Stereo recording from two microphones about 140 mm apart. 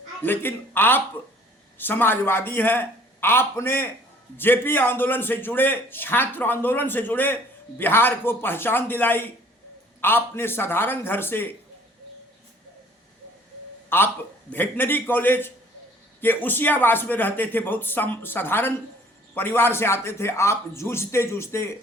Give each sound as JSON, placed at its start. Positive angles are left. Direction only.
{"t": 0.2, "sound": "a man's voice", "side_deg": 15}
{"t": 13.9, "sound": "a man's voice", "side_deg": 15}